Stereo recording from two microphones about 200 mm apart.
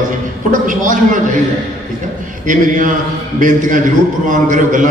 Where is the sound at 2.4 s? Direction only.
40° right (ahead or behind).